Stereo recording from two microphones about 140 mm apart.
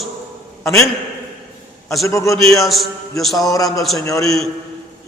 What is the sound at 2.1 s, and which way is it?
Speech, 20° left (ahead or behind).